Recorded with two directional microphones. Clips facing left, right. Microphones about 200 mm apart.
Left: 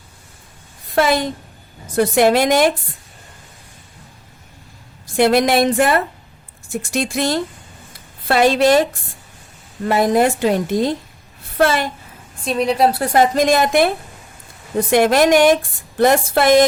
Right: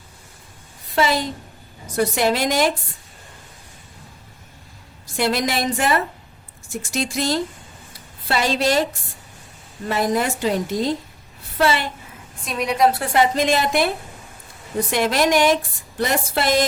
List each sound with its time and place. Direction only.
0.9 s a woman's voice: 55° left (ahead or behind)
5.1 s a woman's voice: 55° left (ahead or behind)
12.5 s a woman's voice: 30° left (ahead or behind); by 16.6 s 50° left (ahead or behind)